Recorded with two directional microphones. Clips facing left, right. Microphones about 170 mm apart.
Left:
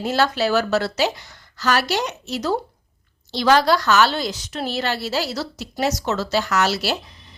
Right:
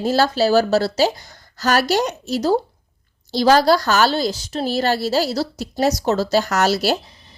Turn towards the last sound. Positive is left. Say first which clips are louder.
# right 3 dB
turn(degrees=-40)  # may be behind; listen again after turning